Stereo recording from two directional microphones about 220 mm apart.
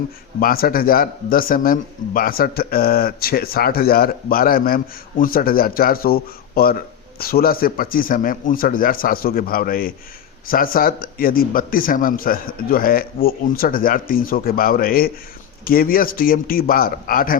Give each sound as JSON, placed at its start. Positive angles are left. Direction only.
{"t": 0.3, "sound": "speech", "side_deg": 40}